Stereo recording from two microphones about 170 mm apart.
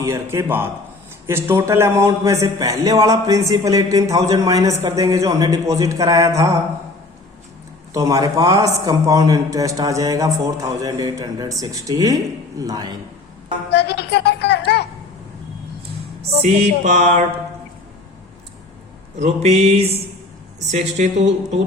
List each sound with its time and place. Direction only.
0.0 s a man's voice: 15° right (ahead or behind)
7.9 s speech: 20° right (ahead or behind)
13.7 s music: 75° left (ahead or behind)
16.4 s music: 40° right (ahead or behind)
19.2 s a sound: 40° right (ahead or behind)
20.6 s music: 40° right (ahead or behind)